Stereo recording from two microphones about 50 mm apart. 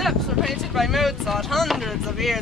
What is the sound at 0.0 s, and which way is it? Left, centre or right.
Speech, centre.